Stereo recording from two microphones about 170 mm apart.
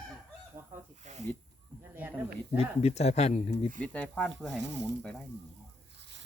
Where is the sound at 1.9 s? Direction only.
10° right (ahead or behind).